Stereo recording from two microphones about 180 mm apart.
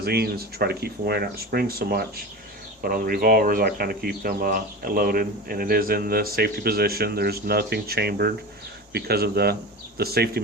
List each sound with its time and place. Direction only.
0.0 s speech: 60° right (ahead or behind)